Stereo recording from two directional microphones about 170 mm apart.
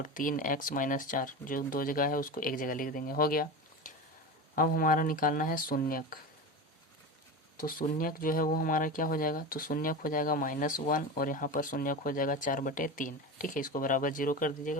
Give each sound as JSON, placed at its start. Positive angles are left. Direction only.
{"t": 0.0, "sound": "speech", "side_deg": 50}
{"t": 4.5, "sound": "speech", "side_deg": 55}
{"t": 7.6, "sound": "speech", "side_deg": 55}